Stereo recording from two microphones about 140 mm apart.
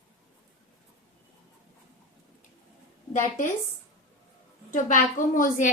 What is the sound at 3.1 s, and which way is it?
Speech, 60° left (ahead or behind).